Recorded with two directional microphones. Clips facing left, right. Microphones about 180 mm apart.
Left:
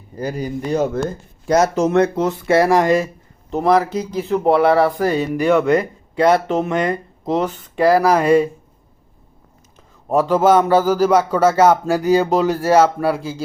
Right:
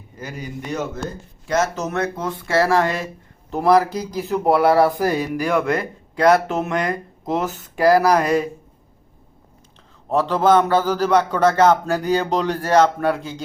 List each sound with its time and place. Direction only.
0.2 s a man's voice: 35° left (ahead or behind); by 2.8 s 20° left (ahead or behind)
3.5 s speech: centre (ahead or behind)
5.6 s speech: 30° left (ahead or behind)
6.5 s speech: 5° right (ahead or behind)
8.2 s speech: 30° left (ahead or behind)
10.1 s a man's voice: 10° left (ahead or behind)